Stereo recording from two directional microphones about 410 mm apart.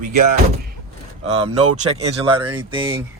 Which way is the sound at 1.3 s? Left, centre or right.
Centre.